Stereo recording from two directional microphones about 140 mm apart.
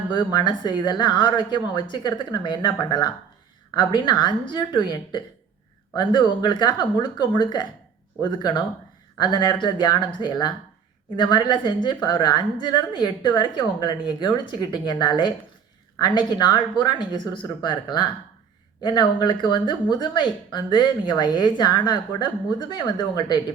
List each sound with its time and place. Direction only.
0.1 s speech: 30° left (ahead or behind)